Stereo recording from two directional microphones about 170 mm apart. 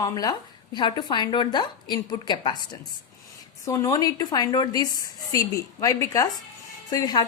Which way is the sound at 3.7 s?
20° left (ahead or behind).